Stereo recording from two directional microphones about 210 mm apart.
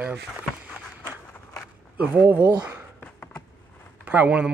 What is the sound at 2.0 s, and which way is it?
Speech, 5° right (ahead or behind).